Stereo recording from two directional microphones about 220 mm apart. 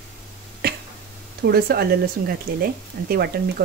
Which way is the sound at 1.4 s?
45° right (ahead or behind).